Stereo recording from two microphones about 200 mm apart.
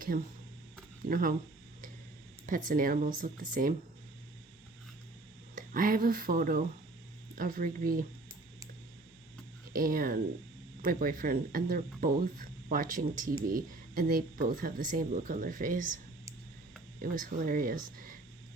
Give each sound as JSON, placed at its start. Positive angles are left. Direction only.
{"t": 1.0, "sound": "speech", "side_deg": -45}
{"t": 2.6, "sound": "speech", "side_deg": -45}
{"t": 5.5, "sound": "speech", "side_deg": -45}
{"t": 9.7, "sound": "speech", "side_deg": -45}
{"t": 17.0, "sound": "speech", "side_deg": -45}